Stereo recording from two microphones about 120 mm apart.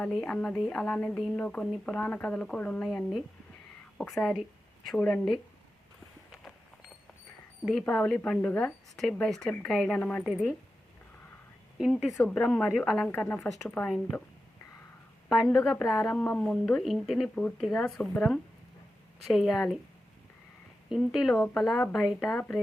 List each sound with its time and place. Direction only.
0.2 s a woman's voice: 10° left (ahead or behind)
7.6 s a woman's voice: 5° left (ahead or behind)
10.0 s a woman's voice: 15° left (ahead or behind)
10.2 s a woman's voice: centre (ahead or behind)
11.9 s a woman's voice: 5° left (ahead or behind)
13.1 s a woman's voice: 15° left (ahead or behind)
15.4 s a woman's voice: centre (ahead or behind)
20.9 s a woman's voice: 5° right (ahead or behind)